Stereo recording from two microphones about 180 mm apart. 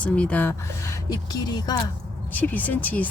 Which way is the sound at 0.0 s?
5° left (ahead or behind).